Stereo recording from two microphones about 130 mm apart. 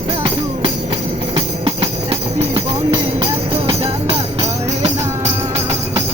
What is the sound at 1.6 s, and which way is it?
Music, 50° right (ahead or behind).